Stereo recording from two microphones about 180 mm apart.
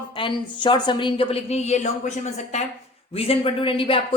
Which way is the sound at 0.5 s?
25° left (ahead or behind).